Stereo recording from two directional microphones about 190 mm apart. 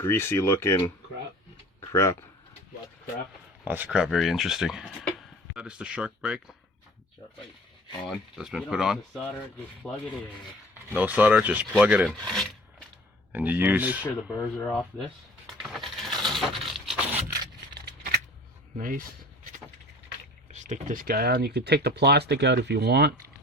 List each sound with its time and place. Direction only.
0.0 s speech: 15° left (ahead or behind)
1.9 s speech: 15° left (ahead or behind)
3.6 s speech: 10° right (ahead or behind)
8.4 s speech: centre (ahead or behind)
10.9 s speech: 10° right (ahead or behind)
13.3 s speech: 10° right (ahead or behind)
15.8 s a sound: centre (ahead or behind)
17.7 s scissors: 55° right (ahead or behind)
18.8 s speech: 45° right (ahead or behind)
20.5 s speech: 40° right (ahead or behind); by 23.1 s 60° right (ahead or behind)